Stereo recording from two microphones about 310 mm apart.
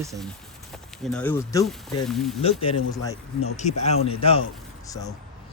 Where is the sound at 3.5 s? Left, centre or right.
Left.